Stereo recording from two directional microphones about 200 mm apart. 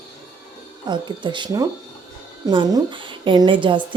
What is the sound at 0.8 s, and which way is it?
A woman's voice, 25° right (ahead or behind).